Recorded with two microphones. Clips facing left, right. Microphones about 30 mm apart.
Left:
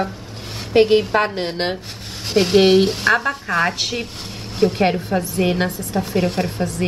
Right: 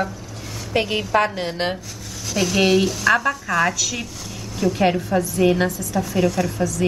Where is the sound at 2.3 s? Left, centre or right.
Left.